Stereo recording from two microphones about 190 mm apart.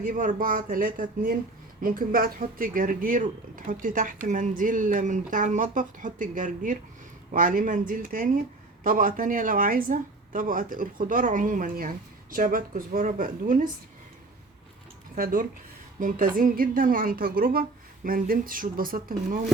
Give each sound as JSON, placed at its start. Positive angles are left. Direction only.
{"t": 0.0, "sound": "speech", "side_deg": -40}
{"t": 15.1, "sound": "speech", "side_deg": -45}